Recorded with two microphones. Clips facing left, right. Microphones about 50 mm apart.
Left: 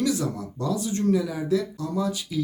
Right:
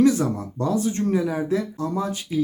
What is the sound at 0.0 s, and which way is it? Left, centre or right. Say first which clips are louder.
Speech: right 7 dB; right.